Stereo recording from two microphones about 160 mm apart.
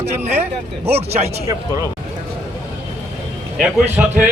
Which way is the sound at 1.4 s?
20° right (ahead or behind).